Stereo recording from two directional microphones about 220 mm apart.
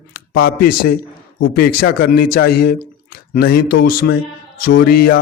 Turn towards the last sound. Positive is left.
turn(degrees=45)  # may be behind; listen again after turning